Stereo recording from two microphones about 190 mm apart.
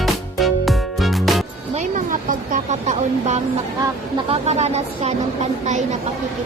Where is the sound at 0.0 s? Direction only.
Centre (ahead or behind).